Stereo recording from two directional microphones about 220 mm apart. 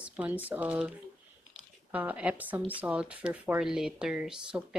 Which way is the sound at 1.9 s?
5° right (ahead or behind).